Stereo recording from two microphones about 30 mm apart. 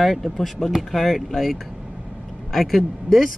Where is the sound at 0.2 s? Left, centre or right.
Centre.